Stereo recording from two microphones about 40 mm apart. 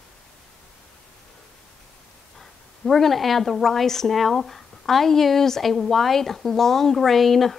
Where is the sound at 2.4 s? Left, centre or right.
Centre.